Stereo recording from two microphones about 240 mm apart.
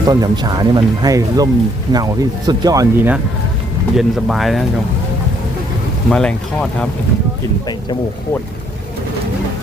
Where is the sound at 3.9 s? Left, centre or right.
Centre.